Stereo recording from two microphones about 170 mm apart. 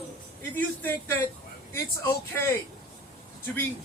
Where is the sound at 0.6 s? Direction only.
10° left (ahead or behind).